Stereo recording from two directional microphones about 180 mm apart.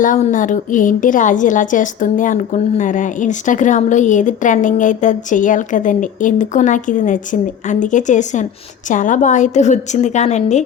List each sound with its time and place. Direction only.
0.0 s a woman's voice: 45° left (ahead or behind)